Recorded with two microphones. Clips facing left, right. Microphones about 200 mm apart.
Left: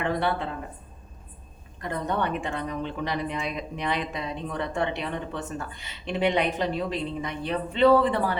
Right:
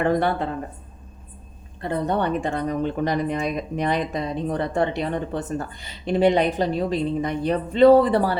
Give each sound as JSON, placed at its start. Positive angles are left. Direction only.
{"t": 0.0, "sound": "speech", "side_deg": -45}
{"t": 1.8, "sound": "speech", "side_deg": -35}